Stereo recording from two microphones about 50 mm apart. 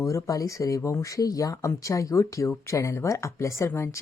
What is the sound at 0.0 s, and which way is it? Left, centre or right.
Speech, left.